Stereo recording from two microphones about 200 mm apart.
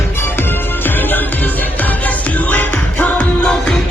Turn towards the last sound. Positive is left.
turn(degrees=5)  # may be behind; listen again after turning